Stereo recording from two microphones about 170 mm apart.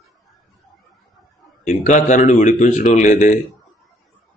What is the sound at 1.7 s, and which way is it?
Speech, 45° left (ahead or behind).